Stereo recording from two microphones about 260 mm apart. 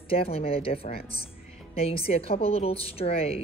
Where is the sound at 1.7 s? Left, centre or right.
Left.